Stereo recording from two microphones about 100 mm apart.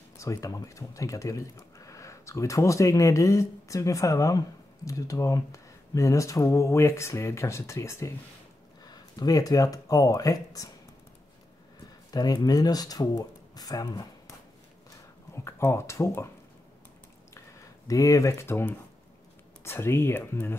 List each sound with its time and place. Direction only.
0.2 s speech: 35° left (ahead or behind)
8.8 s speech: 45° left (ahead or behind)
12.1 s speech: 40° left (ahead or behind)
15.3 s speech: 25° left (ahead or behind)
17.3 s a sound: 35° left (ahead or behind)
19.6 s speech: 25° left (ahead or behind)